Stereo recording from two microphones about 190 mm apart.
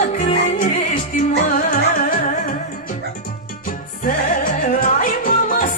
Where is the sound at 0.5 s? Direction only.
45° left (ahead or behind).